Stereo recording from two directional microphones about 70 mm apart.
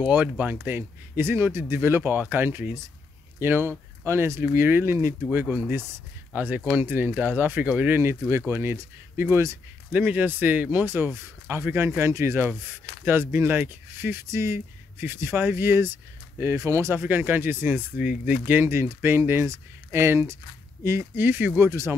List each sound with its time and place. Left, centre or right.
0.0 s speech: right
0.7 s speech: right
8.0 s speech: right
14.2 s speech: right
16.5 s speech: right
16.9 s speech: right